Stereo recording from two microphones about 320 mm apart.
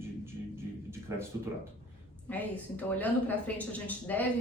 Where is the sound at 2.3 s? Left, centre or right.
Centre.